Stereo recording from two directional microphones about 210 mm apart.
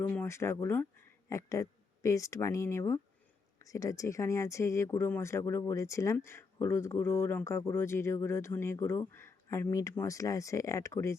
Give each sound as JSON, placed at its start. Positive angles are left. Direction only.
{"t": 0.1, "sound": "speech", "side_deg": 10}